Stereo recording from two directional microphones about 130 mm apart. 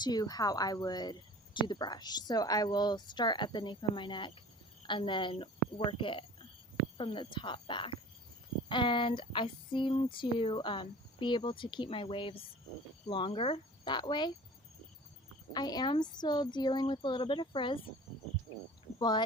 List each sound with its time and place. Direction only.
0.0 s speech: 30° left (ahead or behind)
15.5 s speech: 30° left (ahead or behind)
18.9 s speech: 35° left (ahead or behind)